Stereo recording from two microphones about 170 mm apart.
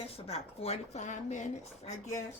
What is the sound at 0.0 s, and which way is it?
Speech, 35° left (ahead or behind).